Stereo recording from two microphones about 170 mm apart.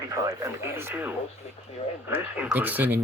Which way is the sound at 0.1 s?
20° right (ahead or behind).